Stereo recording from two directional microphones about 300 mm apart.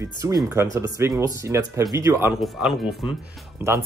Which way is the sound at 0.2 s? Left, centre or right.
Centre.